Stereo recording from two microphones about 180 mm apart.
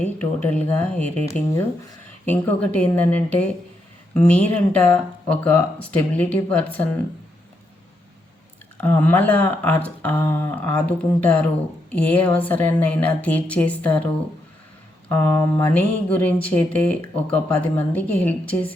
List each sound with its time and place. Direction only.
0.0 s speech: 5° left (ahead or behind)
8.8 s speech: 10° left (ahead or behind)
15.1 s speech: 10° left (ahead or behind)